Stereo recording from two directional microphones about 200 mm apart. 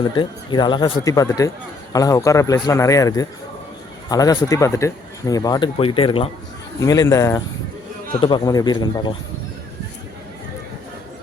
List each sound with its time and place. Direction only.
0.2 s a man's voice: 25° left (ahead or behind)